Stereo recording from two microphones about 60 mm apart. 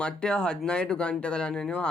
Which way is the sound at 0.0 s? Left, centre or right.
Centre.